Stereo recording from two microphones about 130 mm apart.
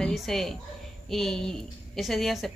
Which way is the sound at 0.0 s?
Centre (ahead or behind).